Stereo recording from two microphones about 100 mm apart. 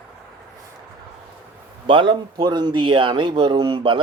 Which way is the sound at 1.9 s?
55° right (ahead or behind).